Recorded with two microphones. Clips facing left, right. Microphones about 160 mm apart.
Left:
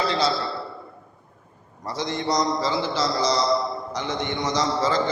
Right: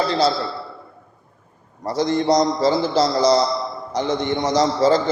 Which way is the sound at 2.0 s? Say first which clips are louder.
Right 7 dB; 40° right (ahead or behind).